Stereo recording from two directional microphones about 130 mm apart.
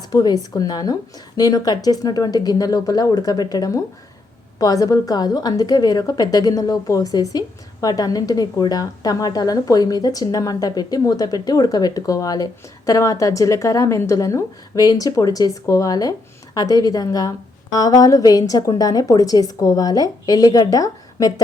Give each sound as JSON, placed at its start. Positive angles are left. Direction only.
{"t": 0.1, "sound": "a woman's voice", "side_deg": 30}